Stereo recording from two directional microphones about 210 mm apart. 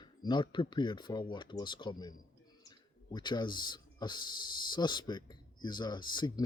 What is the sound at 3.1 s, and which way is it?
Speech, 20° left (ahead or behind).